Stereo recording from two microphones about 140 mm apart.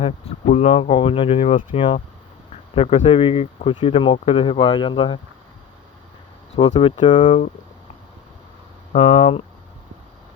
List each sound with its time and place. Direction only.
0.0 s speech: 50° left (ahead or behind)
6.6 s speech: 45° left (ahead or behind)
8.9 s speech: 55° left (ahead or behind)